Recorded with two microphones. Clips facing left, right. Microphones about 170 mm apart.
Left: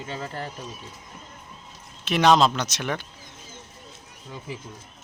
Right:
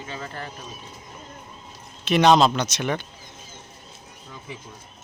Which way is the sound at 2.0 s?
Centre (ahead or behind).